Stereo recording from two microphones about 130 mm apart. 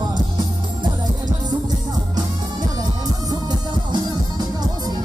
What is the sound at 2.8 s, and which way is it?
Music, 30° right (ahead or behind).